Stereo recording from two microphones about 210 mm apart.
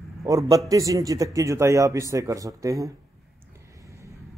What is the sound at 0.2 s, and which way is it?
A man's voice, 15° right (ahead or behind).